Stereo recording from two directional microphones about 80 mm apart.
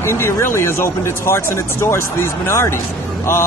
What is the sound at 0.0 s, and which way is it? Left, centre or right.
Speech, left.